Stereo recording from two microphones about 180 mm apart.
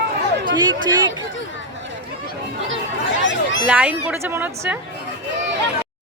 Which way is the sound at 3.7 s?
5° right (ahead or behind).